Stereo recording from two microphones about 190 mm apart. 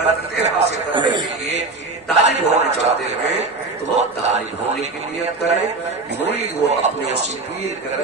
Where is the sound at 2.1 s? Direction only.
35° right (ahead or behind).